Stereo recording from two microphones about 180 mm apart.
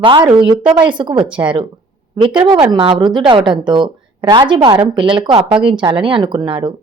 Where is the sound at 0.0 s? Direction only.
25° right (ahead or behind).